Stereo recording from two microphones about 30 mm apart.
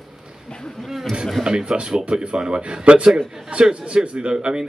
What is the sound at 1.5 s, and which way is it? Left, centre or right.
Speech, right.